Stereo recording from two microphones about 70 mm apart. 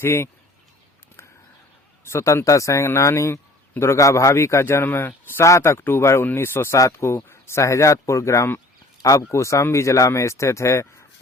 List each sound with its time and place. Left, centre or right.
0.0 s speech: left
2.0 s speech: left
6.7 s speech: left
9.0 s a sound: left
9.3 s speech: left